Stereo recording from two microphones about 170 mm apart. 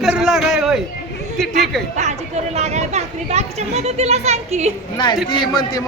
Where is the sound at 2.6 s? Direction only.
40° right (ahead or behind).